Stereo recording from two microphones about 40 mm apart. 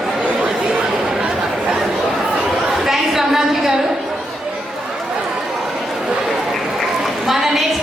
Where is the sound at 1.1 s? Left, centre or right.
Centre.